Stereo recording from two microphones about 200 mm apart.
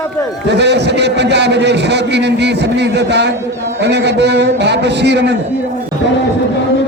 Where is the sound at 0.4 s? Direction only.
60° right (ahead or behind).